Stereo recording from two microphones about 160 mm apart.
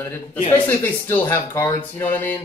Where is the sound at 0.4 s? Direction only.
35° left (ahead or behind).